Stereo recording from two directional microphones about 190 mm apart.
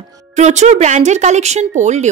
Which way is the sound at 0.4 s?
35° right (ahead or behind).